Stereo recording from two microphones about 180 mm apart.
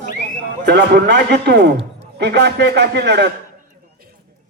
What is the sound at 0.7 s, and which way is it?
A man's voice, 65° right (ahead or behind).